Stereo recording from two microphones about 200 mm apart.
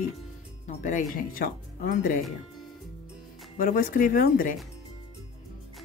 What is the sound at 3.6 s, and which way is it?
Speech, 45° left (ahead or behind).